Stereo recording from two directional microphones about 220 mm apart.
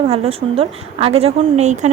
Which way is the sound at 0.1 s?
25° right (ahead or behind).